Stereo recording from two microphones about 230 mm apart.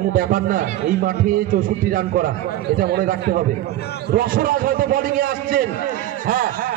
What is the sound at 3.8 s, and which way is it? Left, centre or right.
Speech, left.